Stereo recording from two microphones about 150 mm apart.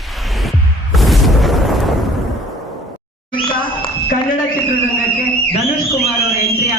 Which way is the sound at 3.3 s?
35° left (ahead or behind).